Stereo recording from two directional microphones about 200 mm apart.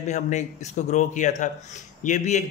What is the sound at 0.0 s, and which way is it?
A man's voice, 35° left (ahead or behind).